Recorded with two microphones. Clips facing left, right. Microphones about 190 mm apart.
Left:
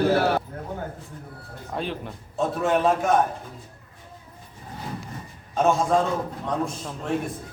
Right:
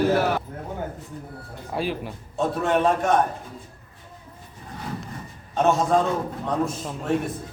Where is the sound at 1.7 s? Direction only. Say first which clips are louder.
Right 3 dB; 5° right (ahead or behind).